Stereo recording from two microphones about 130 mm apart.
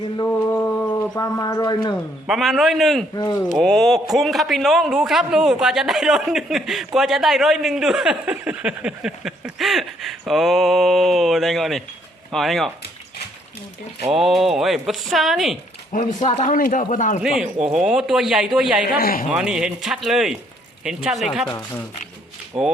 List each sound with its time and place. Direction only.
0.3 s mantra: 15° left (ahead or behind)
0.9 s speech: 30° left (ahead or behind)
2.2 s speech: centre (ahead or behind)
14.1 s speech: centre (ahead or behind)
15.9 s speech: 80° left
16.2 s speech: 60° left (ahead or behind); by 17.2 s 80° left
17.2 s speech: 5° right (ahead or behind)
22.5 s speech: 45° right (ahead or behind)